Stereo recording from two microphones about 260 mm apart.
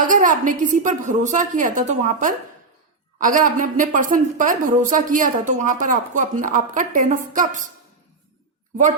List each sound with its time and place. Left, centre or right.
0.0 s a woman's voice: right